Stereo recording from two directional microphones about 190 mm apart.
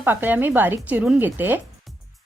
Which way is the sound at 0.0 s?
10° right (ahead or behind).